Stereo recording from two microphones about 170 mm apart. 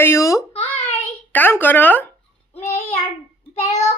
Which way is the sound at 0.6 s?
10° left (ahead or behind).